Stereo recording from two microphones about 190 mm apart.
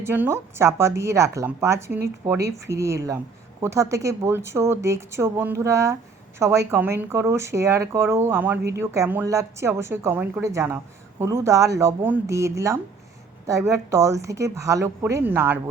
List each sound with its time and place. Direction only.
0.0 s speech: 10° right (ahead or behind)